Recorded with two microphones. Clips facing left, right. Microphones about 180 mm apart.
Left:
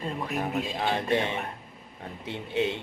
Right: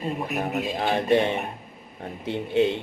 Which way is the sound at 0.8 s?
40° right (ahead or behind).